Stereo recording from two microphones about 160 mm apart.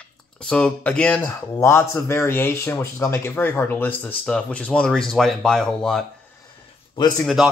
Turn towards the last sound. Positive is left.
turn(degrees=0)  # may be behind; listen again after turning